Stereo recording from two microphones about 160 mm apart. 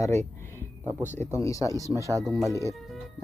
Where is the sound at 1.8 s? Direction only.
20° right (ahead or behind).